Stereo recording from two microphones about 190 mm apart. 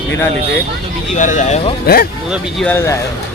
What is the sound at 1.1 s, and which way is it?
Speech, 40° left (ahead or behind).